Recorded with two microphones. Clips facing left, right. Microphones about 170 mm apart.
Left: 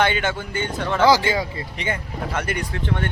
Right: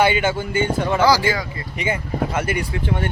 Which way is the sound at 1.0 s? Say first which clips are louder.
Left 2 dB; 25° left (ahead or behind).